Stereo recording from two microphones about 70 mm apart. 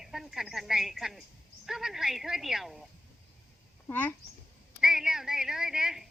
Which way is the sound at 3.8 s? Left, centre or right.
Left.